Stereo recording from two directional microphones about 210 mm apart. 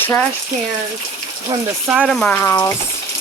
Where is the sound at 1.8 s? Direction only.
5° right (ahead or behind); by 2.7 s 10° left (ahead or behind).